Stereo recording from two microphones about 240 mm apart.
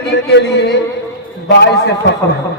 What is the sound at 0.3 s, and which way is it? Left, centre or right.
A man's voice, left.